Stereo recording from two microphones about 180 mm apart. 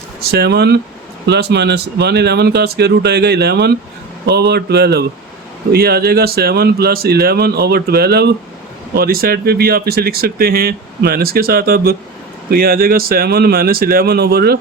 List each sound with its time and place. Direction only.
0.2 s speech: 60° right (ahead or behind)